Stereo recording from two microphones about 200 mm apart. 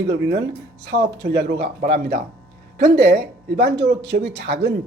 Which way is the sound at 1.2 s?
55° right (ahead or behind).